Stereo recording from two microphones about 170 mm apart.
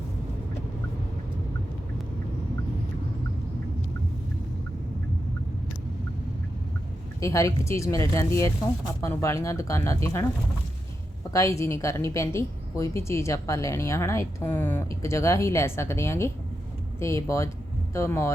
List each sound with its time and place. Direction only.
7.2 s a woman's voice: 15° left (ahead or behind)
11.3 s a woman's voice: 20° left (ahead or behind)